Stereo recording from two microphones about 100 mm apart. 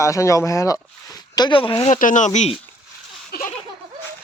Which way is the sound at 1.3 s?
45° left (ahead or behind).